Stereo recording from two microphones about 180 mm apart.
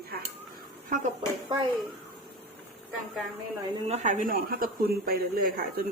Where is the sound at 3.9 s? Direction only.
45° right (ahead or behind).